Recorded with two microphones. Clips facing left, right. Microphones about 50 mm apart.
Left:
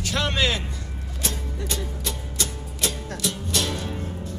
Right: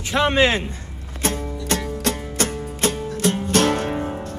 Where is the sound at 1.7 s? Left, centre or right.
Right.